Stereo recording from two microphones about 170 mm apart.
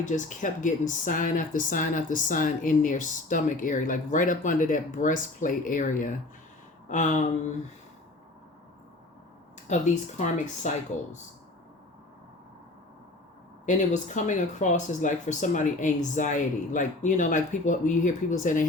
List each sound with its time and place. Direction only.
0.0 s speech: 50° left (ahead or behind)
6.8 s a sound: 45° left (ahead or behind)
9.6 s speech: 45° left (ahead or behind)
13.7 s speech: 45° left (ahead or behind)